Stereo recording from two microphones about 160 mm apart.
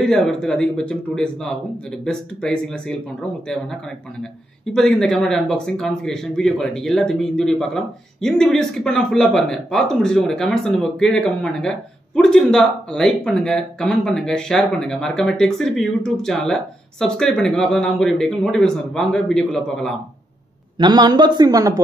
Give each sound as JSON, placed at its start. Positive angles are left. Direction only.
{"t": 0.0, "sound": "speech", "side_deg": 5}
{"t": 4.7, "sound": "speech", "side_deg": 5}
{"t": 20.7, "sound": "a man's voice", "side_deg": -25}